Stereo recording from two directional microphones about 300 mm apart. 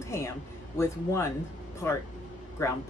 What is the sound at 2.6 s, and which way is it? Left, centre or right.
Speech, centre.